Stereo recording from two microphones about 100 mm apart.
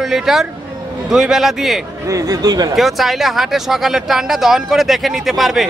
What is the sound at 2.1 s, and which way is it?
Speech, 35° right (ahead or behind).